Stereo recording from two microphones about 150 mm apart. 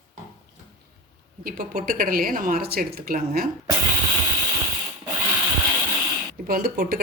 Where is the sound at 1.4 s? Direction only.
75° right (ahead or behind).